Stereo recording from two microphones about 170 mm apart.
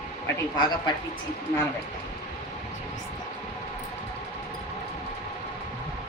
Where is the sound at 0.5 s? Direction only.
25° left (ahead or behind).